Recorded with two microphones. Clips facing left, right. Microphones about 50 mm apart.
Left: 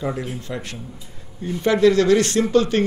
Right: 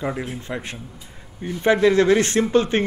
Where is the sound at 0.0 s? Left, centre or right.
Right.